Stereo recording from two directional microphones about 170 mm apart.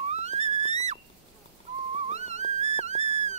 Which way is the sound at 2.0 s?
40° right (ahead or behind).